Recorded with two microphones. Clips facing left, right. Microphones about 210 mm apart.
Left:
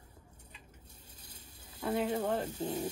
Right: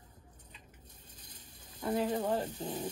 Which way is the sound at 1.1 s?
10° left (ahead or behind).